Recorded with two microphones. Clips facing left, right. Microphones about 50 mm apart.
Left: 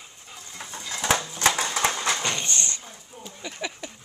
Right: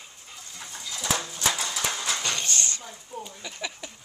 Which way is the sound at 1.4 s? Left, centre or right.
Left.